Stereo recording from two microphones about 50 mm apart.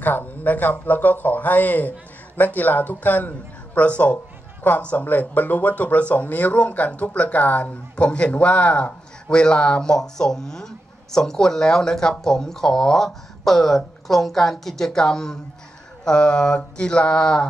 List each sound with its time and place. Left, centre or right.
0.0 s a woman's voice: left
7.9 s a man's voice: left